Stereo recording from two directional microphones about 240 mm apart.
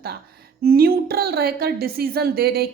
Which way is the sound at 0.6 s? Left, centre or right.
Right.